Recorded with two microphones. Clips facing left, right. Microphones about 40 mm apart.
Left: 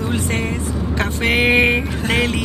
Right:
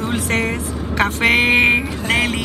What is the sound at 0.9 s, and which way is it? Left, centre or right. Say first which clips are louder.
Speech: right 4 dB; right.